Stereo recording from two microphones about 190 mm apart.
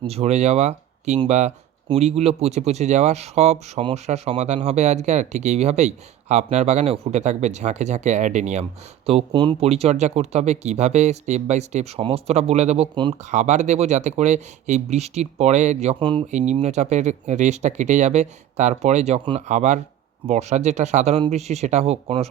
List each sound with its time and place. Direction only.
0.1 s speech: 35° right (ahead or behind)
9.0 s speech: 25° right (ahead or behind)
16.5 s speech: 35° right (ahead or behind)